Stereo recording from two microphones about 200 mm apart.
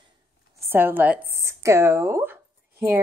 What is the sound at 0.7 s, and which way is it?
A woman's voice, 10° right (ahead or behind).